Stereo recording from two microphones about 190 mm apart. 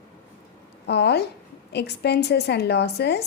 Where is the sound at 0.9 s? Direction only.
60° left (ahead or behind).